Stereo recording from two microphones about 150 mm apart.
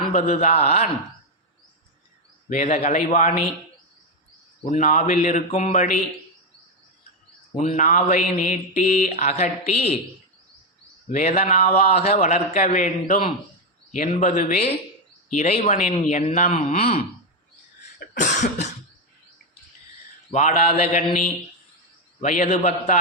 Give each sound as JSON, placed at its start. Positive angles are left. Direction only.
{"t": 0.1, "sound": "speech", "side_deg": 50}
{"t": 2.5, "sound": "a man's voice", "side_deg": 55}
{"t": 4.6, "sound": "a man's voice", "side_deg": 60}
{"t": 7.5, "sound": "speech", "side_deg": 50}
{"t": 11.1, "sound": "a man's voice", "side_deg": 45}
{"t": 18.0, "sound": "cough", "side_deg": 60}
{"t": 20.3, "sound": "a man's voice", "side_deg": 60}
{"t": 20.7, "sound": "speech", "side_deg": 45}
{"t": 22.2, "sound": "speech", "side_deg": 50}